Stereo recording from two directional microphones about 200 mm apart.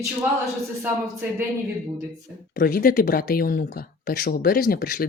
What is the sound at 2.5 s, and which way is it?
Speech, 50° left (ahead or behind).